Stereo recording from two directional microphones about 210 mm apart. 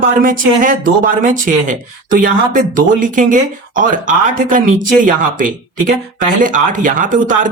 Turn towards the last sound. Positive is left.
turn(degrees=-40)  # may be behind; listen again after turning